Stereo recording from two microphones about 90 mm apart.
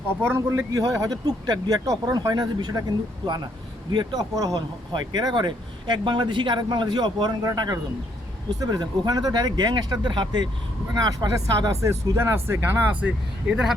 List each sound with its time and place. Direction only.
0.2 s speech: 25° right (ahead or behind)
13.5 s speech: 5° right (ahead or behind)